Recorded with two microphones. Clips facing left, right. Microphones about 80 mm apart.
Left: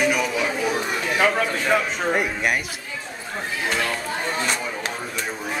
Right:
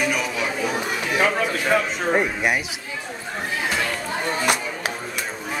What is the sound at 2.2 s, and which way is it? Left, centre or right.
Speech, centre.